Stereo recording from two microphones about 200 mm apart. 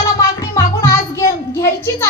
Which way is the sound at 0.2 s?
15° left (ahead or behind).